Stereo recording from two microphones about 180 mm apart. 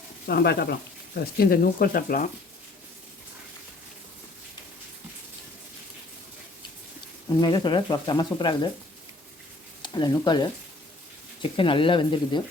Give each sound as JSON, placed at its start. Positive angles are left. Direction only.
{"t": 0.3, "sound": "speech", "side_deg": 65}
{"t": 7.3, "sound": "speech", "side_deg": 25}
{"t": 9.8, "sound": "speech", "side_deg": 25}
{"t": 11.5, "sound": "speech", "side_deg": 30}